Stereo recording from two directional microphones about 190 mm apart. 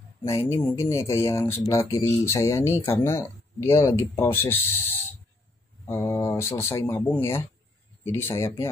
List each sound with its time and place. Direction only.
0.3 s speech: 15° left (ahead or behind)